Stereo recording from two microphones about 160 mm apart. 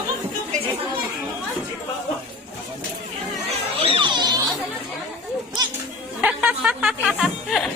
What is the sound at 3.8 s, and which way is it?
Music, 30° right (ahead or behind).